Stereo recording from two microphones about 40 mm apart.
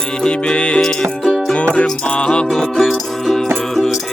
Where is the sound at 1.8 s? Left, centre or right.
Left.